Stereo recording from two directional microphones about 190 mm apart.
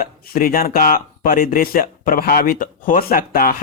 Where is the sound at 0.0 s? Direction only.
50° left (ahead or behind).